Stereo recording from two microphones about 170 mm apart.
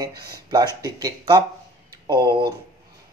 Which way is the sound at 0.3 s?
25° right (ahead or behind).